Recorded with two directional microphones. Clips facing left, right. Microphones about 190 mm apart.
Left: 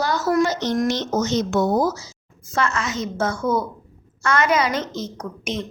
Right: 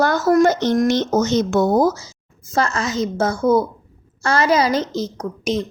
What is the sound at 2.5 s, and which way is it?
A woman's voice, 35° right (ahead or behind).